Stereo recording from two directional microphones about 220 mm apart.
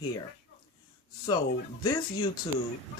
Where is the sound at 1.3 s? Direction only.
20° left (ahead or behind).